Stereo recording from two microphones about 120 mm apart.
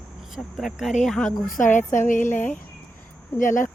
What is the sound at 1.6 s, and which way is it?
Speech, 90° left.